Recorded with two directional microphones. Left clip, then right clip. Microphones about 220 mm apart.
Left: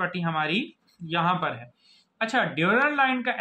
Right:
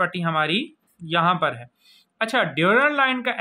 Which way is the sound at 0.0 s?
50° right (ahead or behind).